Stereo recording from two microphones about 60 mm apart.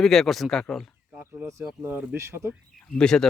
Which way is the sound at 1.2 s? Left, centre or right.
Right.